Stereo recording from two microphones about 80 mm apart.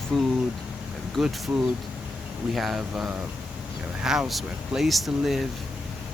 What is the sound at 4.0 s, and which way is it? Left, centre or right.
Speech, centre.